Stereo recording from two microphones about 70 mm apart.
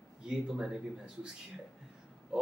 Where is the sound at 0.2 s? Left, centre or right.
Centre.